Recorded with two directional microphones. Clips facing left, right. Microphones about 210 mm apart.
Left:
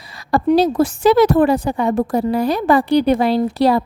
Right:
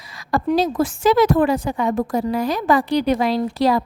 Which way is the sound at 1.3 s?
35° left (ahead or behind).